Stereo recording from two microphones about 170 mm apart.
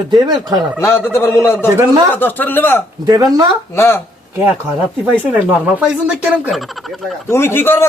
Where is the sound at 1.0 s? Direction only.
15° left (ahead or behind).